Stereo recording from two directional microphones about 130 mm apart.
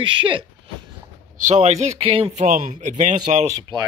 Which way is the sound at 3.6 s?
35° right (ahead or behind).